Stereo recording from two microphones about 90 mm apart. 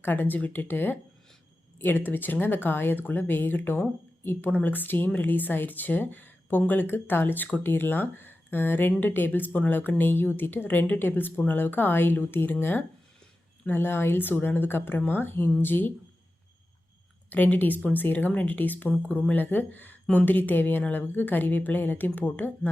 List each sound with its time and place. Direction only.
0.0 s speech: 20° left (ahead or behind)
17.2 s speech: 20° left (ahead or behind)